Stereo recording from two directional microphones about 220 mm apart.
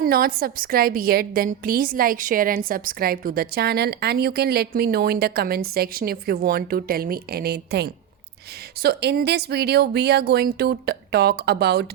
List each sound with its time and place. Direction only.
0.0 s a woman's voice: 40° right (ahead or behind)